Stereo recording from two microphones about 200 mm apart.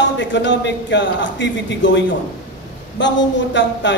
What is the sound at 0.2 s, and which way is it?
A man's voice, 65° left (ahead or behind).